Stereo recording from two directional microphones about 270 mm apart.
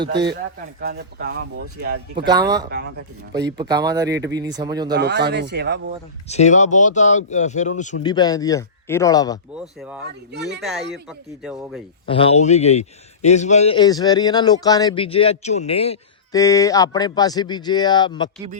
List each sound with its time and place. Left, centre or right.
0.8 s speech: right
1.3 s speech: right
2.1 s speech: centre
4.9 s speech: right
6.2 s speech: left
8.0 s a man's voice: centre
9.6 s speech: centre
10.3 s speech: right
10.6 s speech: centre
12.0 s a man's voice: centre